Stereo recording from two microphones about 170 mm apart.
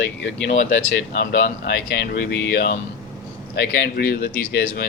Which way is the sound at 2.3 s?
70° left (ahead or behind).